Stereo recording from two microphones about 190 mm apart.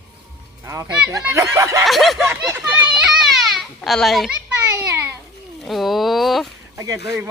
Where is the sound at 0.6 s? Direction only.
15° right (ahead or behind).